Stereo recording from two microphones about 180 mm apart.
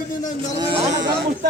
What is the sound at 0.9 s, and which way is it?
Speech, 70° right (ahead or behind).